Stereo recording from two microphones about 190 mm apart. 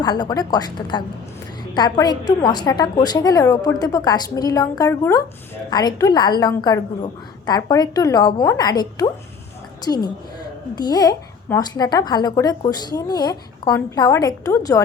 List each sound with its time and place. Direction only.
0.0 s a woman's voice: 20° left (ahead or behind)